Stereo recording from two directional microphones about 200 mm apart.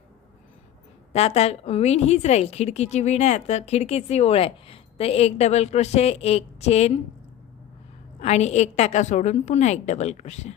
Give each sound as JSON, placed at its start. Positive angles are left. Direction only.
{"t": 1.1, "sound": "a woman's voice", "side_deg": 30}
{"t": 8.2, "sound": "a woman's voice", "side_deg": 35}